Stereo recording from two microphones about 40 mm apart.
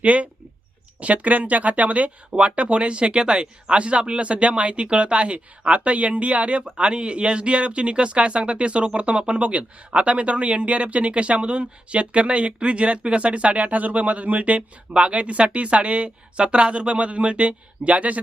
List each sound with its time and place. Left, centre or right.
0.0 s speech: right